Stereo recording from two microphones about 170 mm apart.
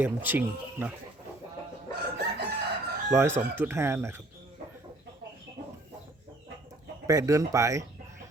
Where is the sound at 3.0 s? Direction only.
15° right (ahead or behind).